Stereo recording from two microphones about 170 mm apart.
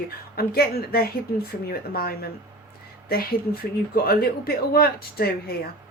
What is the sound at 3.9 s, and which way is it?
Speech, 60° left (ahead or behind).